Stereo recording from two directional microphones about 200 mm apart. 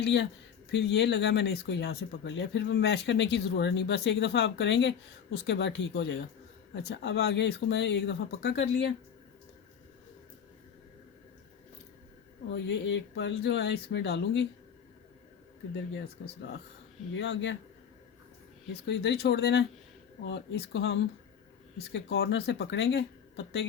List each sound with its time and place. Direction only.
0.0 s speech: 60° left (ahead or behind)
12.5 s speech: 60° left (ahead or behind)
17.2 s speech: 65° left (ahead or behind)
18.7 s speech: 55° left (ahead or behind)